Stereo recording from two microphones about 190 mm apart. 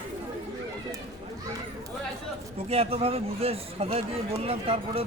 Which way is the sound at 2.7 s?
30° right (ahead or behind).